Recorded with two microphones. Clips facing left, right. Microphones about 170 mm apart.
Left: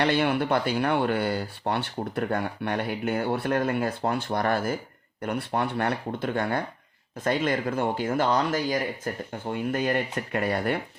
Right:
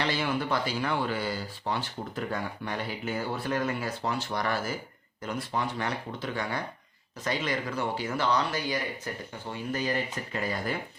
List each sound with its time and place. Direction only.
0.0 s speech: 60° left (ahead or behind)